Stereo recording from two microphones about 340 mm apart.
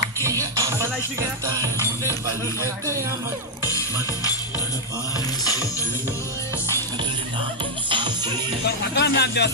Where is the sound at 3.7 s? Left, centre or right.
Centre.